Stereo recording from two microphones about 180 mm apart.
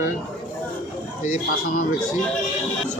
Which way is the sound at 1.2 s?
40° left (ahead or behind).